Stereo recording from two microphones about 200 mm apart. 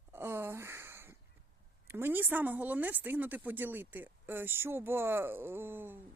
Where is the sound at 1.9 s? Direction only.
10° right (ahead or behind).